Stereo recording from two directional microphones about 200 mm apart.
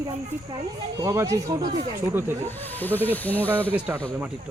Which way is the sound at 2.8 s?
10° left (ahead or behind).